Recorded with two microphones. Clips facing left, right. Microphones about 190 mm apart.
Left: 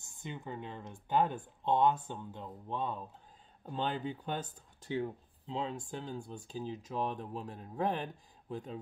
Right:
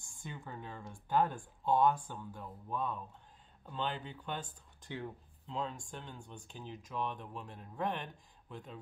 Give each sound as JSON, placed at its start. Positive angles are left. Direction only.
{"t": 0.0, "sound": "speech", "side_deg": 20}
{"t": 3.6, "sound": "speech", "side_deg": 40}